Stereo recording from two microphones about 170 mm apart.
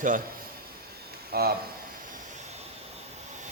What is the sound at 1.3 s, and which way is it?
Speech, 65° right (ahead or behind).